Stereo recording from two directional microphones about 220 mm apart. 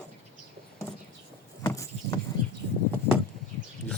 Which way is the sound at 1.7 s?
15° left (ahead or behind).